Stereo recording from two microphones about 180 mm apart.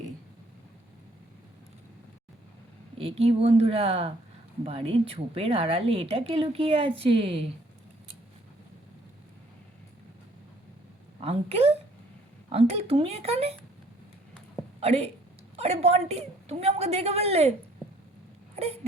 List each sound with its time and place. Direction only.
3.0 s a woman's voice: 35° right (ahead or behind)
11.2 s a woman's voice: 35° right (ahead or behind)
14.8 s a woman's voice: 35° right (ahead or behind)
18.5 s a sound: 35° right (ahead or behind)